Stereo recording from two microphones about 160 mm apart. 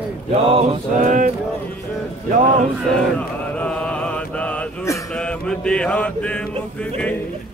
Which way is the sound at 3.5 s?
5° left (ahead or behind).